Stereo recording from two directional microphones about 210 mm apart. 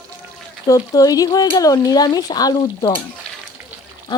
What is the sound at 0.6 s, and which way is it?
Speech, 15° left (ahead or behind).